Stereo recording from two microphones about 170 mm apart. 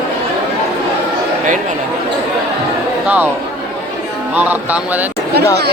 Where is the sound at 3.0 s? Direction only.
10° right (ahead or behind).